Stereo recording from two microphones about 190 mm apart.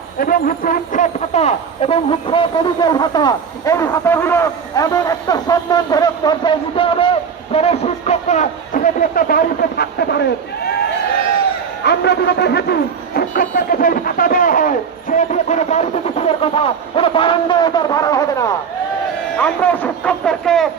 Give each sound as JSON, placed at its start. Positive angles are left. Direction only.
{"t": 0.2, "sound": "speech", "side_deg": 50}
{"t": 11.9, "sound": "speech", "side_deg": 60}
{"t": 19.4, "sound": "speech", "side_deg": 5}